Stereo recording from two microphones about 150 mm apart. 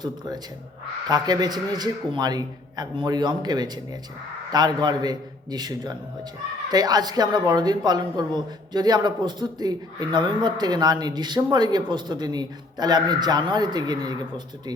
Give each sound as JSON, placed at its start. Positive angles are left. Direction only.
{"t": 1.0, "sound": "speech", "side_deg": -25}